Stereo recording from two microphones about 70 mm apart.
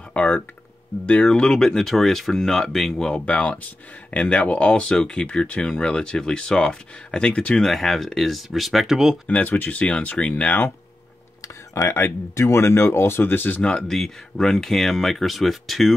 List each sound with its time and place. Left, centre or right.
0.1 s speech: centre
3.3 s speech: centre
7.6 s speech: centre
9.3 s speech: left
11.4 s speech: left
13.6 s speech: centre